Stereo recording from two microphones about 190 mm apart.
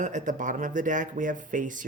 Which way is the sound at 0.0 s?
40° right (ahead or behind).